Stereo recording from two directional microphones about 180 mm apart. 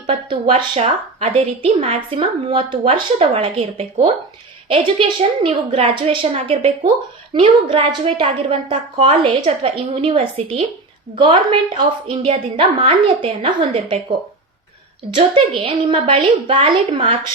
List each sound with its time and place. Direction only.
0.1 s a woman's voice: 30° right (ahead or behind)
15.1 s a woman's voice: 30° right (ahead or behind)